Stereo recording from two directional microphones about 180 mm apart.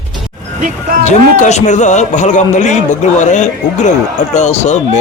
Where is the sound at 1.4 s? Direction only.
40° left (ahead or behind).